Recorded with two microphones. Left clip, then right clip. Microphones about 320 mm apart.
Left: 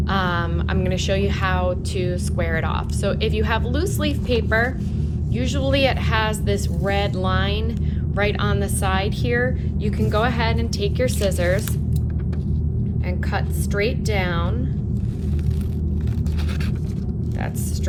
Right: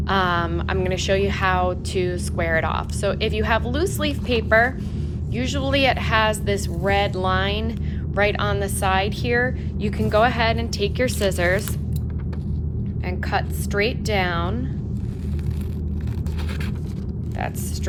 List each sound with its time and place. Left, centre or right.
0.1 s a woman's voice: right
13.3 s a woman's voice: right